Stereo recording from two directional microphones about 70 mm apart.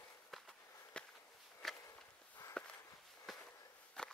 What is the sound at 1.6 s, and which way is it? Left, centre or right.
Walk, centre.